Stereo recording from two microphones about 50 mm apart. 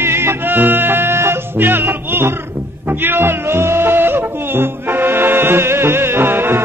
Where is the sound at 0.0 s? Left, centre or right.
Right.